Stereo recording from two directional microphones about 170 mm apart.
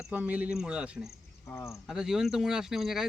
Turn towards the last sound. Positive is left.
turn(degrees=0)  # may be behind; listen again after turning